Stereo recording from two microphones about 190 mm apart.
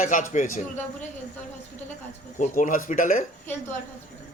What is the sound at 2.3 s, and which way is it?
Speech, 40° left (ahead or behind).